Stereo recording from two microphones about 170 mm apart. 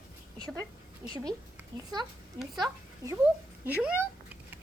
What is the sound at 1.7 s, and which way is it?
A child's voice, 25° right (ahead or behind).